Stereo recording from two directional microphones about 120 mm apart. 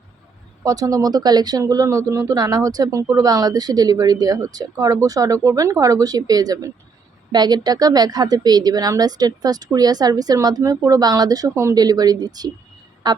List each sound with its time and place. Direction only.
0.6 s speech: 30° right (ahead or behind)